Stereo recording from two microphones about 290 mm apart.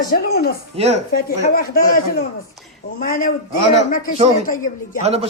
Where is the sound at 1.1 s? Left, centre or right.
Left.